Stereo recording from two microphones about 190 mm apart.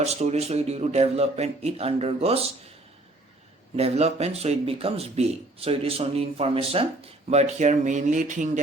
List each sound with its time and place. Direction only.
0.0 s speech: 35° right (ahead or behind)
3.8 s speech: 35° right (ahead or behind)